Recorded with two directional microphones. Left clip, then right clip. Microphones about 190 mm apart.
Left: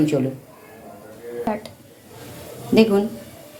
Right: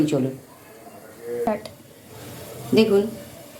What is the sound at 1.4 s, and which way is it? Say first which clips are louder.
Speech: right 1 dB; 10° right (ahead or behind).